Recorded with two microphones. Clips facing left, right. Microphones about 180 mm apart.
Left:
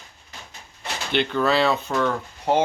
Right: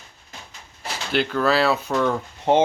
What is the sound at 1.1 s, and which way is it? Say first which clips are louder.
Speech: right 1 dB; centre (ahead or behind).